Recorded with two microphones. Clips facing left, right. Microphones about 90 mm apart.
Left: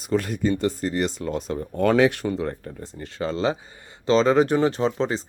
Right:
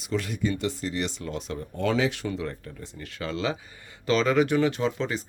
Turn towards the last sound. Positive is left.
turn(degrees=35)  # may be behind; listen again after turning